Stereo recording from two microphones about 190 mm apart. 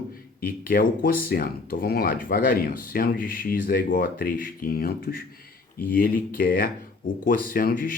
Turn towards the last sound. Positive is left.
turn(degrees=45)  # may be behind; listen again after turning